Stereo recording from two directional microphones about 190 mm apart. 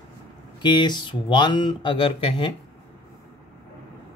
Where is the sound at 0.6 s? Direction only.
25° left (ahead or behind).